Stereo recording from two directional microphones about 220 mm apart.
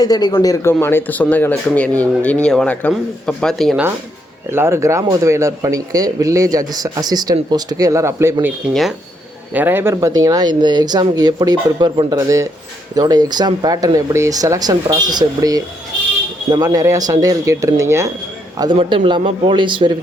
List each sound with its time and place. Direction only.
0.0 s speech: 20° left (ahead or behind); by 3.8 s centre (ahead or behind)
4.5 s a man's voice: 10° right (ahead or behind)